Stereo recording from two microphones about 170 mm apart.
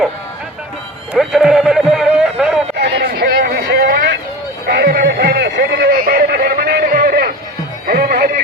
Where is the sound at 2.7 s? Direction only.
70° right (ahead or behind).